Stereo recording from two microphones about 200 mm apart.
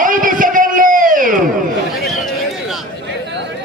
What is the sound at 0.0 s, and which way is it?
Music, 45° right (ahead or behind).